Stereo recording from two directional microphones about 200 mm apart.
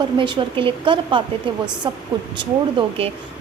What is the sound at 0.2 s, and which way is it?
Speech, 25° right (ahead or behind).